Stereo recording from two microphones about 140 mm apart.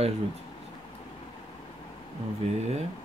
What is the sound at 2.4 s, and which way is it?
Speech, 50° right (ahead or behind).